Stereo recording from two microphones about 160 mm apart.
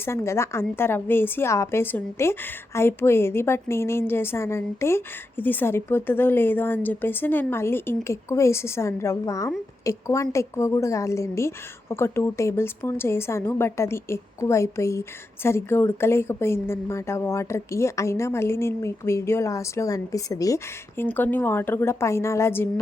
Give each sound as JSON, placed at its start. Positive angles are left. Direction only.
{"t": 0.0, "sound": "a woman's voice", "side_deg": 15}